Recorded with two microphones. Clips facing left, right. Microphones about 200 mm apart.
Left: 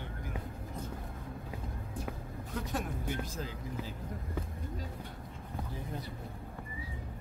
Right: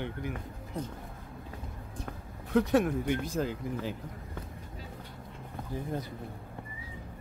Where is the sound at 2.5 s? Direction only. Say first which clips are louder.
Right 13 dB; 70° right (ahead or behind).